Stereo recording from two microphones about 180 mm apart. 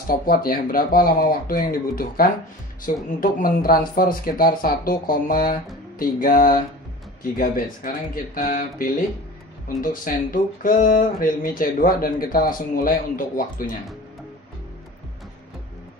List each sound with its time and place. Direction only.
0.3 s speech: 55° left (ahead or behind)